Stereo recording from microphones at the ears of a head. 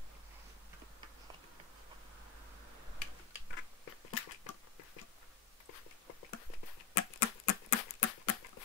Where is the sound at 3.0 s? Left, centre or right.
Left.